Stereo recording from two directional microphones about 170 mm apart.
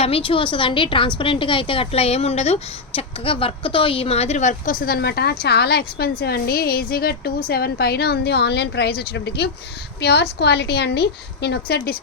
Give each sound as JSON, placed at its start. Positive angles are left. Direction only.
{"t": 0.0, "sound": "a woman's voice", "side_deg": 30}